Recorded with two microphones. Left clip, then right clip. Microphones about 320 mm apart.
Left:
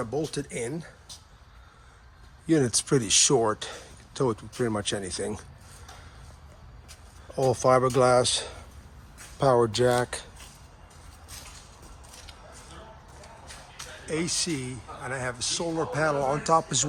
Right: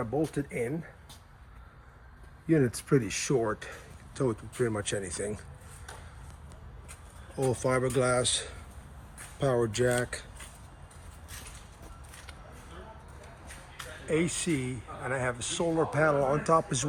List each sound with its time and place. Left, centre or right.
0.0 s speech: centre
2.5 s speech: centre
7.3 s speech: centre
14.1 s speech: centre